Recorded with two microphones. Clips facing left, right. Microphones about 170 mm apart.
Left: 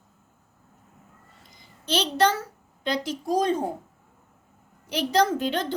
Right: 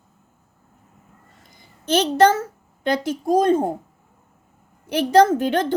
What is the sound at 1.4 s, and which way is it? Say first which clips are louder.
A woman's voice: right 2 dB; 50° right (ahead or behind).